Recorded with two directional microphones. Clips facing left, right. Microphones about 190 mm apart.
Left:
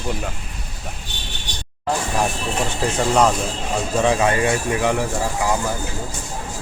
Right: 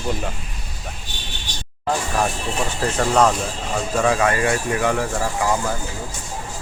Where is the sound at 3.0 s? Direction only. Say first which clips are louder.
Even; 10° left (ahead or behind).